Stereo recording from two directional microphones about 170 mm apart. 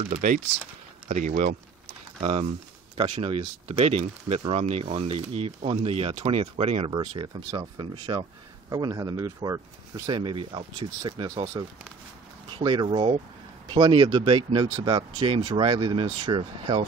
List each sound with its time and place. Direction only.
0.1 s speech: 50° right (ahead or behind)
1.0 s a sound: 50° right (ahead or behind)
2.1 s speech: 35° right (ahead or behind)